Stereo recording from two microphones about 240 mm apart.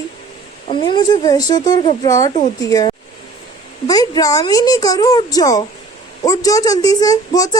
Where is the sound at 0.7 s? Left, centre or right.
Centre.